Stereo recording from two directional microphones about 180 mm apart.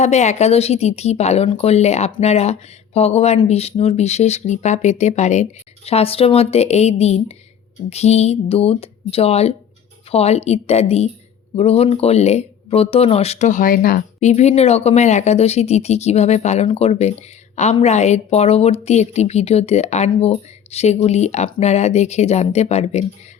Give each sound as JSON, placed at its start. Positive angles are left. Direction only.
{"t": 0.0, "sound": "speech", "side_deg": 40}
{"t": 14.2, "sound": "speech", "side_deg": 40}